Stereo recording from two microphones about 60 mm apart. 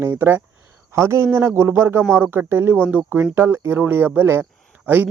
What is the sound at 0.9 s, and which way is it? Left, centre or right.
A man's voice, right.